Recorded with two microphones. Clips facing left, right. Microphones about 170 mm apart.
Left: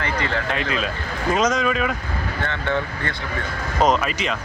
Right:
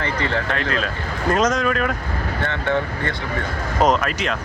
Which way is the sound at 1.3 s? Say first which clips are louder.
Right 1 dB; centre (ahead or behind).